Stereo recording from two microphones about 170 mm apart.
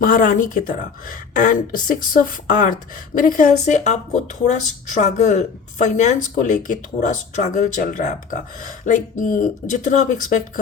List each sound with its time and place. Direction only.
0.0 s a woman's voice: 55° left (ahead or behind)